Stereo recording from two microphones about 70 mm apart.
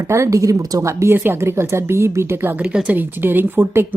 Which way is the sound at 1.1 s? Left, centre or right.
Right.